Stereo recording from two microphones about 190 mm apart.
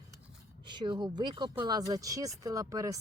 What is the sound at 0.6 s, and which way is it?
Speech, 25° right (ahead or behind).